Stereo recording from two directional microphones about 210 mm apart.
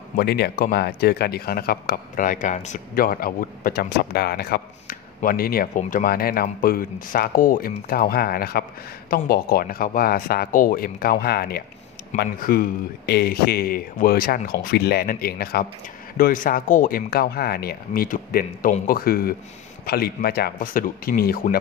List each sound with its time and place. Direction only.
0.2 s speech: 50° left (ahead or behind)